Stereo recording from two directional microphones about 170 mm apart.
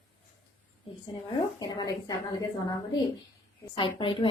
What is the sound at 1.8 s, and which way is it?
Speech, 25° left (ahead or behind).